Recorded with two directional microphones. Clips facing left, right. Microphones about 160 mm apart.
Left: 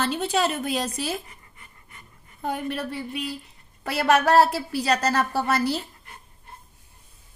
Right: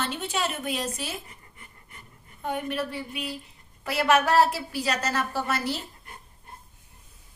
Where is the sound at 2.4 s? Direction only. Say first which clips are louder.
Left 1 dB; 35° left (ahead or behind).